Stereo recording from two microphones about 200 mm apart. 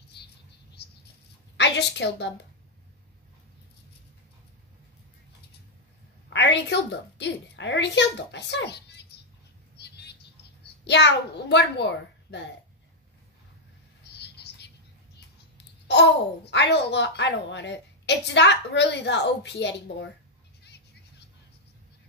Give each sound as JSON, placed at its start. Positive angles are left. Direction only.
{"t": 0.2, "sound": "patter", "side_deg": 55}
{"t": 0.8, "sound": "bird", "side_deg": 55}
{"t": 1.6, "sound": "a woman's voice", "side_deg": 60}
{"t": 6.3, "sound": "a woman's voice", "side_deg": 60}
{"t": 9.8, "sound": "a sound", "side_deg": 55}
{"t": 10.6, "sound": "a child's voice", "side_deg": 60}
{"t": 14.0, "sound": "a sound", "side_deg": 55}
{"t": 15.1, "sound": "a child's voice", "side_deg": 60}